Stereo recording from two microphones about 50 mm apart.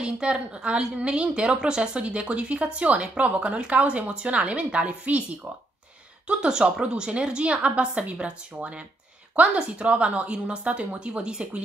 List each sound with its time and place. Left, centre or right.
0.0 s a woman's voice: centre
6.2 s a woman's voice: right